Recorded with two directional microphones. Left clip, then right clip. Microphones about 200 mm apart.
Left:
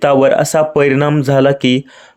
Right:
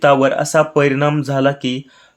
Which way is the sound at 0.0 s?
40° left (ahead or behind).